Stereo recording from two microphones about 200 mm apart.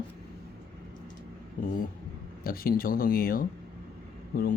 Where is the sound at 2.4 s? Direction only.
45° left (ahead or behind).